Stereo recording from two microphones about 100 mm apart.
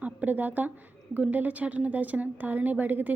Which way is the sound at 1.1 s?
15° right (ahead or behind).